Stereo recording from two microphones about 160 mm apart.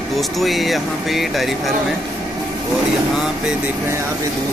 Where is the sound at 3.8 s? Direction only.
15° right (ahead or behind).